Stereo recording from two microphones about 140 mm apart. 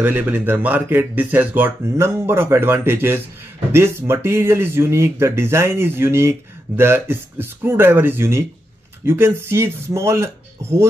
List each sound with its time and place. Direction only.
0.0 s speech: 15° right (ahead or behind)